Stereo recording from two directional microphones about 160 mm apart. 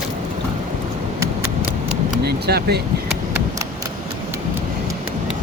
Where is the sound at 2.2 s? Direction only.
90° right.